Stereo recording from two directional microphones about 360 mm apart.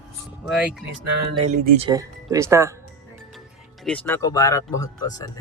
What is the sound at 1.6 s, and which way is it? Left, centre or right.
Speech, centre.